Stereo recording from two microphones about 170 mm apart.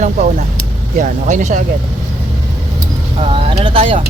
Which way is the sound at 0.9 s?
45° right (ahead or behind).